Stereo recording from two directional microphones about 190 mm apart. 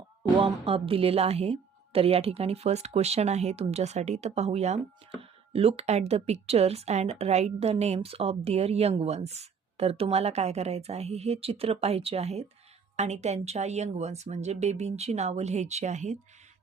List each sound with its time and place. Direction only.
0.2 s a woman's voice: 25° right (ahead or behind)